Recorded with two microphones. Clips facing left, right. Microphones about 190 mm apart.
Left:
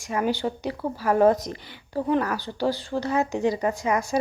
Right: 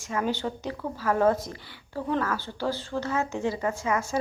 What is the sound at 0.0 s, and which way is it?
A woman's voice, 15° left (ahead or behind).